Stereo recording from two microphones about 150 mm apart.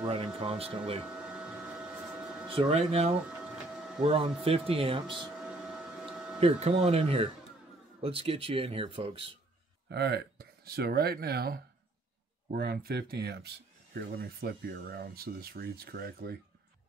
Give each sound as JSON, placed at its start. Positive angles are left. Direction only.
{"t": 0.0, "sound": "speech", "side_deg": -35}
{"t": 1.0, "sound": "printer", "side_deg": -5}
{"t": 2.5, "sound": "speech", "side_deg": -40}
{"t": 5.1, "sound": "a sound", "side_deg": -5}
{"t": 6.4, "sound": "speech", "side_deg": -45}
{"t": 9.8, "sound": "speech", "side_deg": -90}